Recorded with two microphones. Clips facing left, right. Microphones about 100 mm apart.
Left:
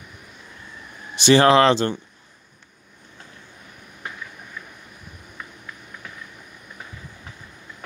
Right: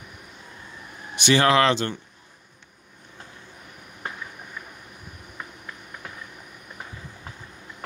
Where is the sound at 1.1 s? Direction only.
30° left (ahead or behind).